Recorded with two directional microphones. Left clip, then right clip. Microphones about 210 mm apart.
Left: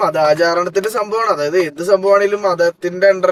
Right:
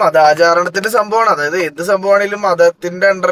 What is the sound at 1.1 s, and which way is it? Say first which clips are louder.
Speech: right 4 dB; 30° right (ahead or behind).